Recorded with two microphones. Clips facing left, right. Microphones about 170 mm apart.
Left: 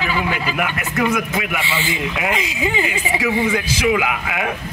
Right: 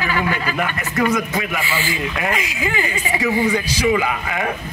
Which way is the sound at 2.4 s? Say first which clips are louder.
Left 2 dB; 25° left (ahead or behind).